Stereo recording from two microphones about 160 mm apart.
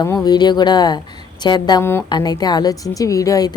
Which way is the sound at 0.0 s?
25° left (ahead or behind).